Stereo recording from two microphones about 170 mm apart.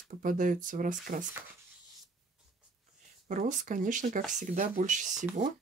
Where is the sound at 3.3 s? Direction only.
50° right (ahead or behind).